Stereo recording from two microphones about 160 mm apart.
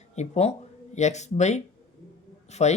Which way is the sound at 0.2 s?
40° left (ahead or behind).